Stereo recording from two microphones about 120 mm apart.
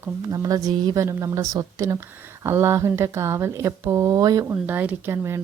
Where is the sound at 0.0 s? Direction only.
30° right (ahead or behind).